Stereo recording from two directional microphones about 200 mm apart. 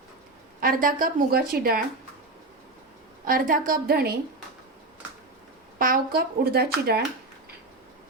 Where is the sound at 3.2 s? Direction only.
45° right (ahead or behind).